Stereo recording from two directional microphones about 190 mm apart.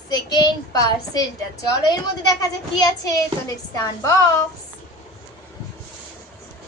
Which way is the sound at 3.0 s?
20° left (ahead or behind).